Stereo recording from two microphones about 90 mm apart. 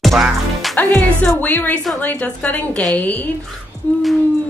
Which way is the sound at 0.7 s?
20° left (ahead or behind).